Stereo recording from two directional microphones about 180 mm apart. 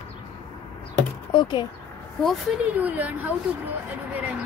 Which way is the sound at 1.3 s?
25° left (ahead or behind).